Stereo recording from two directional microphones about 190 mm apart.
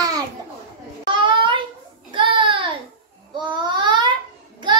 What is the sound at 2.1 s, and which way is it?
Child singing, 25° right (ahead or behind).